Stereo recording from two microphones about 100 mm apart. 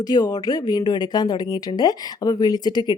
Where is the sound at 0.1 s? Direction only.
40° left (ahead or behind).